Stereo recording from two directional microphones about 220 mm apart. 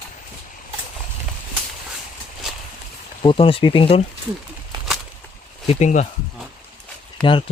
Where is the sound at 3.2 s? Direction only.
25° left (ahead or behind).